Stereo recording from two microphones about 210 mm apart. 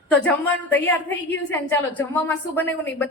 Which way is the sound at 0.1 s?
5° left (ahead or behind).